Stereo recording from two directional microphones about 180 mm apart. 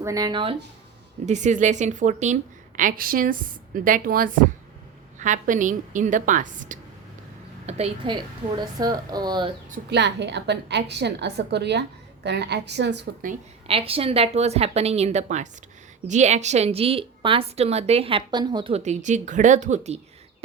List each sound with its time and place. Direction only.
0.0 s a woman's voice: 20° right (ahead or behind)
1.2 s a woman's voice: 40° right (ahead or behind)
7.7 s a woman's voice: 35° right (ahead or behind)
9.9 s a woman's voice: 75° right (ahead or behind)
13.7 s a woman's voice: 30° right (ahead or behind)
18.7 s a woman's voice: 40° right (ahead or behind)